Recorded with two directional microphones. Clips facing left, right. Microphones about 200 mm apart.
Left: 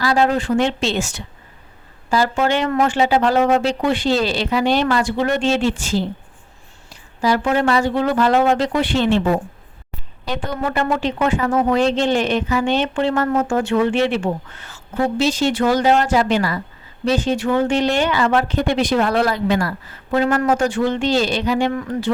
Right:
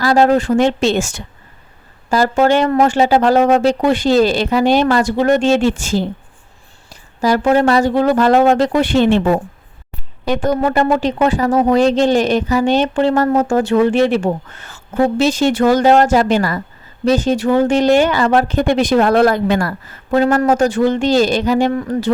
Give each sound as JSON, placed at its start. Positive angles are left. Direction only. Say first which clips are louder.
{"t": 0.0, "sound": "speech", "louder": "right 5 dB", "side_deg": -45}
{"t": 10.2, "sound": "speech", "louder": "right 8 dB", "side_deg": -45}